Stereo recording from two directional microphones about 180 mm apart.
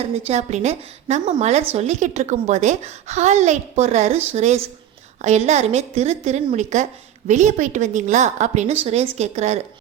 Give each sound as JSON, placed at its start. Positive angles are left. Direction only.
{"t": 0.2, "sound": "a woman's voice", "side_deg": -35}